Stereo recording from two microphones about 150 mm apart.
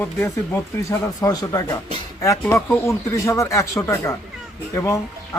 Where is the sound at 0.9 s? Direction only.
20° left (ahead or behind).